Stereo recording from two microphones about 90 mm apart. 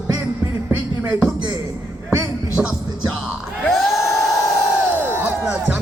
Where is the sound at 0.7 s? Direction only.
20° right (ahead or behind).